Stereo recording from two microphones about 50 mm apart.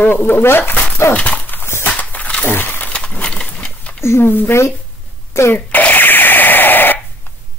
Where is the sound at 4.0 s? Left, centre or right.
Left.